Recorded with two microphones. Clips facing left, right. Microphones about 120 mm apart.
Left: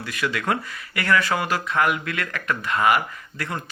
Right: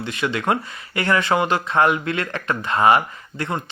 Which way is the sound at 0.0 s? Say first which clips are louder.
Right 3 dB; 25° right (ahead or behind).